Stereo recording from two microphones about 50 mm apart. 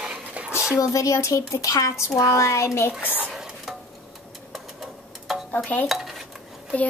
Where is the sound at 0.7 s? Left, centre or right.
Left.